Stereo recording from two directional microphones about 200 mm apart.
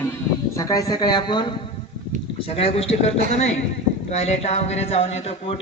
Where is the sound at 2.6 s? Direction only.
30° left (ahead or behind).